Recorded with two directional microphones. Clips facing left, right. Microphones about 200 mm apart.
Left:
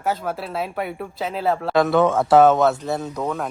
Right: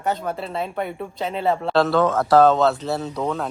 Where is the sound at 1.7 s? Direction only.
20° left (ahead or behind).